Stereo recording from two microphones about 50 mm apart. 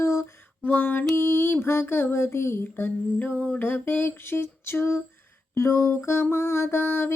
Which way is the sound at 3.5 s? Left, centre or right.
Left.